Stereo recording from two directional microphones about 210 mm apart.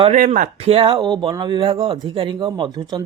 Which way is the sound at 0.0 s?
35° right (ahead or behind).